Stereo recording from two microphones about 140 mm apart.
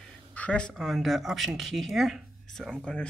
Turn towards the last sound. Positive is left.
turn(degrees=5)  # may be behind; listen again after turning